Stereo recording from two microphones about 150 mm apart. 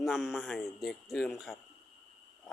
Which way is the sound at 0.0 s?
Centre (ahead or behind).